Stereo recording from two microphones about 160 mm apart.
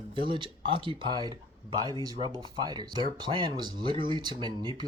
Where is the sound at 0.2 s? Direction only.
30° right (ahead or behind).